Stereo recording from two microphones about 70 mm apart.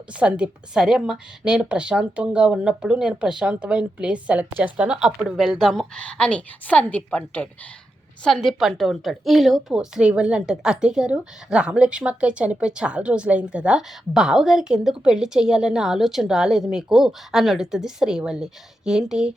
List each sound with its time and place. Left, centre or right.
0.1 s a woman's voice: centre
5.4 s a woman's voice: centre
8.2 s a woman's voice: centre